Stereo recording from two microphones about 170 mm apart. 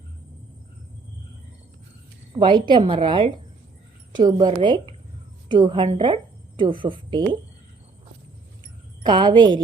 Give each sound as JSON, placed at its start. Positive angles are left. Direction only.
{"t": 2.4, "sound": "a woman's voice", "side_deg": -25}
{"t": 8.6, "sound": "wind chime", "side_deg": -25}